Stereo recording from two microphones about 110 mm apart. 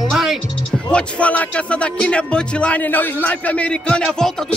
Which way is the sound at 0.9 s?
10° left (ahead or behind).